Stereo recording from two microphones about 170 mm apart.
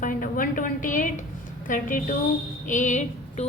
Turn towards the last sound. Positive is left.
turn(degrees=45)  # may be behind; listen again after turning